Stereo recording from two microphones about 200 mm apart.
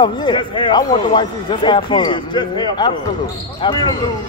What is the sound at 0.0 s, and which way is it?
Speech, 25° left (ahead or behind).